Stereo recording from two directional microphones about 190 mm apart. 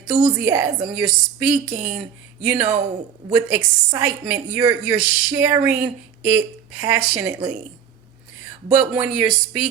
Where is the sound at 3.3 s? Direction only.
10° right (ahead or behind).